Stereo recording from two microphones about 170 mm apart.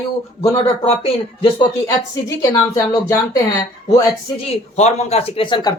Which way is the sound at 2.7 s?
20° left (ahead or behind).